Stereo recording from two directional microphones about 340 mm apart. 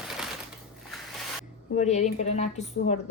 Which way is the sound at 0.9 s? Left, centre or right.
Centre.